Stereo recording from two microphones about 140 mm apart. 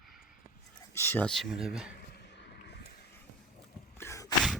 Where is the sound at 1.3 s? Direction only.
5° left (ahead or behind).